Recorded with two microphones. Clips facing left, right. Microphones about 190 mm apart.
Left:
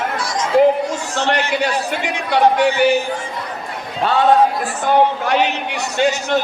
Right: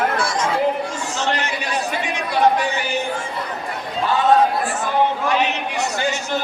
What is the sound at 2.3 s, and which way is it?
Speech, 70° left (ahead or behind).